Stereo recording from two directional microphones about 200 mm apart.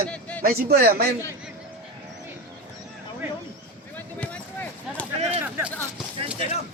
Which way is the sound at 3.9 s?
5° left (ahead or behind).